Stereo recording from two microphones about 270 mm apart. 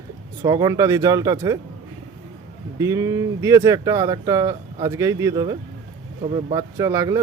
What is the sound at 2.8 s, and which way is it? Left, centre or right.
Speech, centre.